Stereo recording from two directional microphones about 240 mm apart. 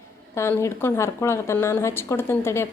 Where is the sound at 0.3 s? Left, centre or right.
Centre.